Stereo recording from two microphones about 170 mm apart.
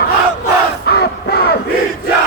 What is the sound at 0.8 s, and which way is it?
Crowd, 70° left (ahead or behind).